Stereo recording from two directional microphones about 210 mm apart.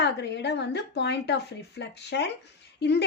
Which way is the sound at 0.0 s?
55° left (ahead or behind).